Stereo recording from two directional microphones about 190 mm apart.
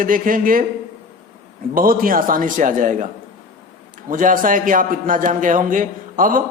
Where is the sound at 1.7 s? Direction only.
50° right (ahead or behind).